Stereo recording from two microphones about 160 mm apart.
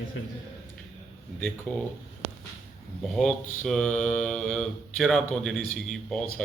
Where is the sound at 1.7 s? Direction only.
10° left (ahead or behind).